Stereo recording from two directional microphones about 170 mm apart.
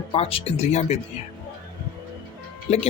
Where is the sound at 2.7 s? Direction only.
40° left (ahead or behind).